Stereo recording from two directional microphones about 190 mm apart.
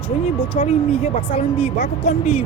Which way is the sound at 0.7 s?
30° left (ahead or behind).